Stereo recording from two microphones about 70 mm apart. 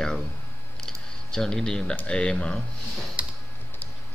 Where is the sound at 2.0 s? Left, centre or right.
Centre.